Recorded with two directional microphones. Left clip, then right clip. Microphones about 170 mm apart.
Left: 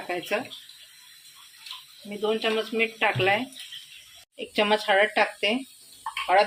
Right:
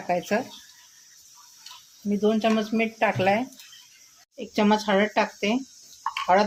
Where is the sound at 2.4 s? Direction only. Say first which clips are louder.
Right 1 dB; 60° right (ahead or behind).